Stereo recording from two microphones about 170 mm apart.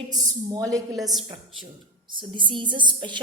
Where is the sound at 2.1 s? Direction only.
30° right (ahead or behind).